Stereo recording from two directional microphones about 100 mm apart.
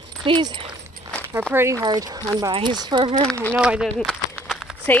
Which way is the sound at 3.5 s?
10° right (ahead or behind).